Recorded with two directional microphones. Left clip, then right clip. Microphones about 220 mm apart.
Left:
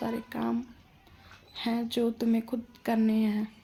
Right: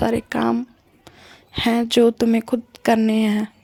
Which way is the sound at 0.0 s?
45° right (ahead or behind).